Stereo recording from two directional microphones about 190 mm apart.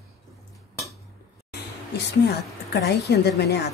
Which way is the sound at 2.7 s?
60° left (ahead or behind).